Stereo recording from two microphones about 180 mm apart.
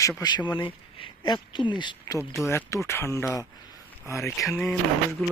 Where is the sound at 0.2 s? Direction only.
25° left (ahead or behind).